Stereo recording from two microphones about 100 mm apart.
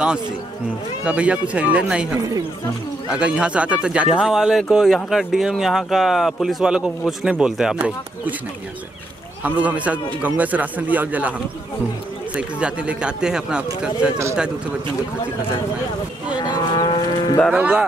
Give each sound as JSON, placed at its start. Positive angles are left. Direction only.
{"t": 1.0, "sound": "speech", "side_deg": -10}
{"t": 3.1, "sound": "speech", "side_deg": -10}
{"t": 9.4, "sound": "speech", "side_deg": -15}
{"t": 12.4, "sound": "speech", "side_deg": -10}
{"t": 16.3, "sound": "moo", "side_deg": 45}
{"t": 17.6, "sound": "speech", "side_deg": -15}